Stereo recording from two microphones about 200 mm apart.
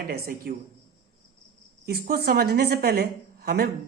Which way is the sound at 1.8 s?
50° right (ahead or behind).